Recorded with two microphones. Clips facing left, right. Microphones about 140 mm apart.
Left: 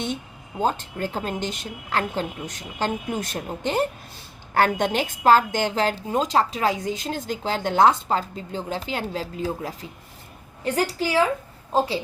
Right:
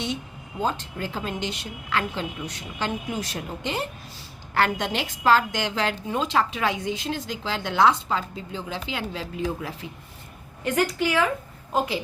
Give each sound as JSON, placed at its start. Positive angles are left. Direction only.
{"t": 0.6, "sound": "a woman's voice", "side_deg": 45}